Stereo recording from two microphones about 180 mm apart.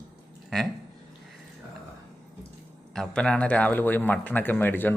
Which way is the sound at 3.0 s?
5° left (ahead or behind).